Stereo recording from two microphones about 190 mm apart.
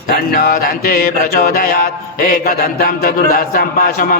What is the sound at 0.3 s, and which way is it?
A man's voice, 50° left (ahead or behind).